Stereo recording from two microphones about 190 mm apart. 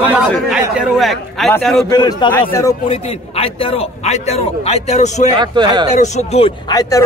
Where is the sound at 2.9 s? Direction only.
30° left (ahead or behind).